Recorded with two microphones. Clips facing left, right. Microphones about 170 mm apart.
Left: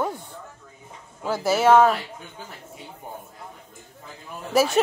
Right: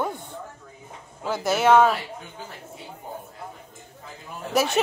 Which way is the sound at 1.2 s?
5° left (ahead or behind).